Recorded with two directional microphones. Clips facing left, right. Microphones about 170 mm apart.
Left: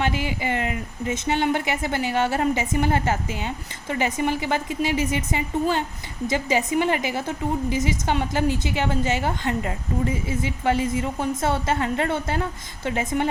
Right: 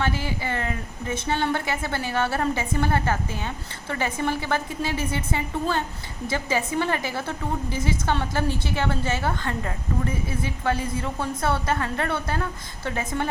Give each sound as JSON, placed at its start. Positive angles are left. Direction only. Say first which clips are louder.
{"t": 0.0, "sound": "a woman's voice", "louder": "left 2 dB", "side_deg": 15}